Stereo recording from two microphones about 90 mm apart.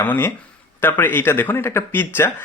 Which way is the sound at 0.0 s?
20° left (ahead or behind).